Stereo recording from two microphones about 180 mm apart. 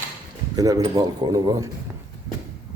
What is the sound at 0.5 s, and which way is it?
A man's voice, 20° right (ahead or behind).